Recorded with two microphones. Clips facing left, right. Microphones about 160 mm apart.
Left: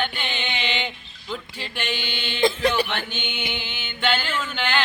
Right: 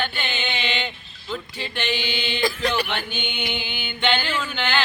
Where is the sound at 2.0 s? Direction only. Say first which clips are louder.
Left 5 dB; 10° right (ahead or behind).